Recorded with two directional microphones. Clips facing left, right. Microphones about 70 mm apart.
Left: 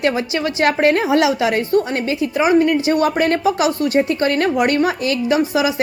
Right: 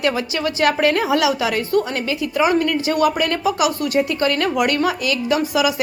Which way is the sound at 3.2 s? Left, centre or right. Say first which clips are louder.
Left 3 dB; left.